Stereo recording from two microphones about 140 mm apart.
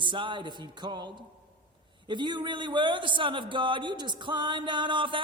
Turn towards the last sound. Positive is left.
turn(degrees=-35)  # may be behind; listen again after turning